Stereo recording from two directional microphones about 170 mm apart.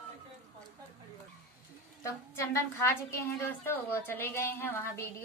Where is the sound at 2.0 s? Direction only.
15° left (ahead or behind).